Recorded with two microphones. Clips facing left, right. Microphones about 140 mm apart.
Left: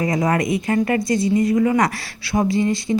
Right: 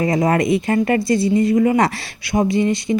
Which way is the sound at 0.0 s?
30° right (ahead or behind).